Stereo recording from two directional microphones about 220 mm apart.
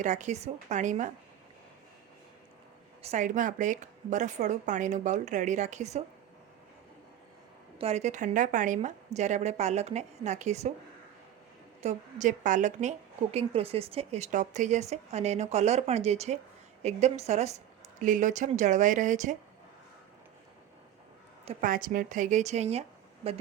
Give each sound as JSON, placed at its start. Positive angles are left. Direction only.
{"t": 0.0, "sound": "a woman's voice", "side_deg": -35}
{"t": 3.0, "sound": "a woman's voice", "side_deg": -30}
{"t": 7.8, "sound": "a woman's voice", "side_deg": -30}
{"t": 11.8, "sound": "a woman's voice", "side_deg": -30}
{"t": 21.4, "sound": "a woman's voice", "side_deg": -40}